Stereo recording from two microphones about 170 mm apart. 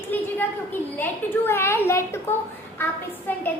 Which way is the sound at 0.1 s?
10° left (ahead or behind).